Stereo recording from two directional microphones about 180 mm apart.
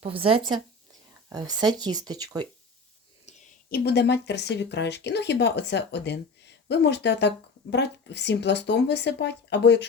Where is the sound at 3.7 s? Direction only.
65° left (ahead or behind).